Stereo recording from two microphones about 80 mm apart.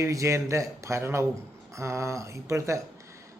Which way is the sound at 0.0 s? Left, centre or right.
Right.